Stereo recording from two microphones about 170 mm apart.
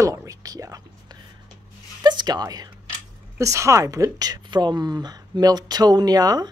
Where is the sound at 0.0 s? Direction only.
20° right (ahead or behind).